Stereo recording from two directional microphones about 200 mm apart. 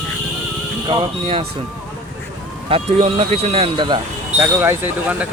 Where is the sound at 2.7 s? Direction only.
30° right (ahead or behind).